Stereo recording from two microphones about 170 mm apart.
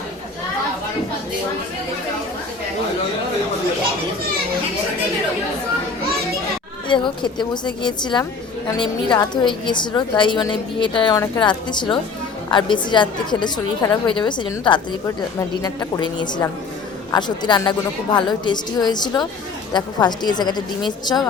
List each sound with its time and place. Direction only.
6.8 s a woman's voice: 30° left (ahead or behind)